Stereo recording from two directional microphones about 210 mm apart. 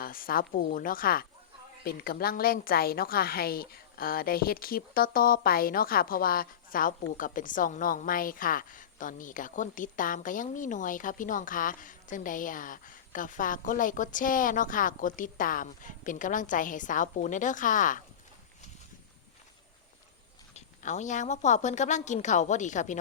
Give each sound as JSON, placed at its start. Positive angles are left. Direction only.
{"t": 0.0, "sound": "a woman's voice", "side_deg": 45}
{"t": 20.5, "sound": "a woman's voice", "side_deg": 35}